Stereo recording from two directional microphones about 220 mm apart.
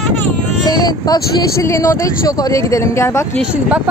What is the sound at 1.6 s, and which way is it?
Speech, 15° left (ahead or behind).